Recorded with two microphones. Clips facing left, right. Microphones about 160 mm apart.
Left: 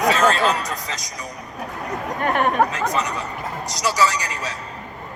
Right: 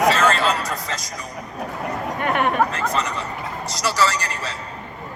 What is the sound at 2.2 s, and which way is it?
Speech, 40° left (ahead or behind).